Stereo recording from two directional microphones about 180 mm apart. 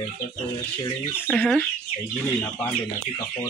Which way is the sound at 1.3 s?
5° left (ahead or behind).